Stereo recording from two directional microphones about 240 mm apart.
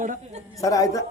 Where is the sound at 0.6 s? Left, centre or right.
Centre.